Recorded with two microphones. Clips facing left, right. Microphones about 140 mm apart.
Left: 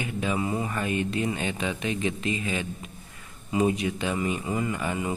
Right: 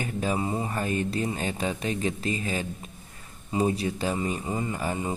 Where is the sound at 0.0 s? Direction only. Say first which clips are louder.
Even; 40° right (ahead or behind).